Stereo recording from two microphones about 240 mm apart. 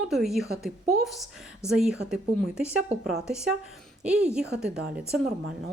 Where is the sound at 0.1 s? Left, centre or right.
Centre.